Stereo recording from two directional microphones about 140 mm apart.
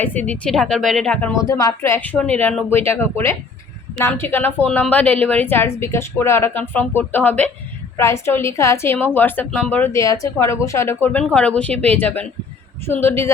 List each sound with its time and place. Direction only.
0.0 s a woman's voice: 10° left (ahead or behind)
1.5 s a woman's voice: 25° left (ahead or behind)